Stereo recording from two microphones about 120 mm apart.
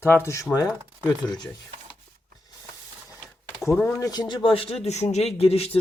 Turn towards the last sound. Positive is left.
turn(degrees=55)  # may be behind; listen again after turning